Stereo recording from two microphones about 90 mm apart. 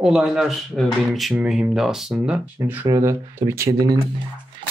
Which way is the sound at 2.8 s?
40° right (ahead or behind).